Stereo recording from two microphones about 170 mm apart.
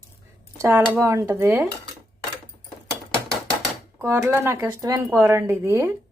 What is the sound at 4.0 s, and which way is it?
Speech, 15° right (ahead or behind).